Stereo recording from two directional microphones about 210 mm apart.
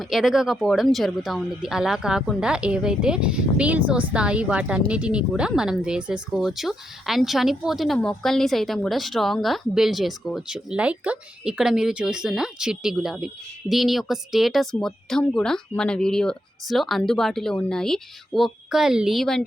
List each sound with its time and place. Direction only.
0.0 s speech: centre (ahead or behind)